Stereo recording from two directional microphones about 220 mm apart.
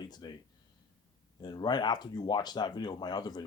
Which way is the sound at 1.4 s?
20° left (ahead or behind).